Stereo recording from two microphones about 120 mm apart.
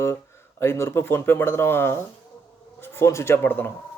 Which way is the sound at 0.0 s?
20° left (ahead or behind).